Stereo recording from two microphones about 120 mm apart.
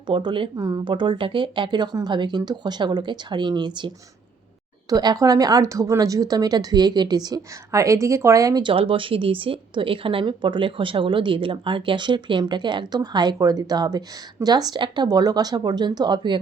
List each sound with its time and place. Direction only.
0.1 s speech: 40° right (ahead or behind)
0.5 s speech: 30° right (ahead or behind)
8.6 s speech: 50° right (ahead or behind)